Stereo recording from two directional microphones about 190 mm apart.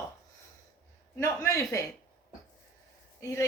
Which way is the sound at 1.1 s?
15° left (ahead or behind).